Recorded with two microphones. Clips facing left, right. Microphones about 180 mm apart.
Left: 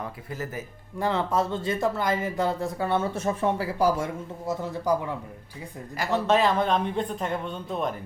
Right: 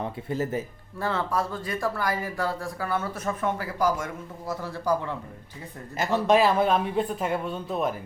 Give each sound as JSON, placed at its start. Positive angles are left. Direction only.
{"t": 0.0, "sound": "speech", "side_deg": -25}
{"t": 0.9, "sound": "speech", "side_deg": 15}
{"t": 6.2, "sound": "speech", "side_deg": -10}